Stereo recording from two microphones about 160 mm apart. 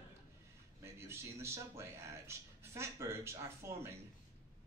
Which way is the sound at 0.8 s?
15° right (ahead or behind).